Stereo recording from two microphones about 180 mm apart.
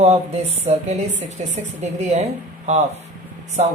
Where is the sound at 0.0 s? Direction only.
35° right (ahead or behind).